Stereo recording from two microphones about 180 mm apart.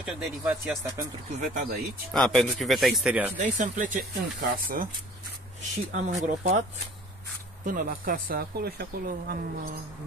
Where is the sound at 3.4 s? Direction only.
45° right (ahead or behind).